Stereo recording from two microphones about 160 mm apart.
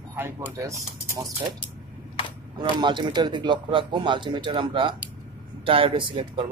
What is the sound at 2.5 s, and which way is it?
Speech, 30° right (ahead or behind).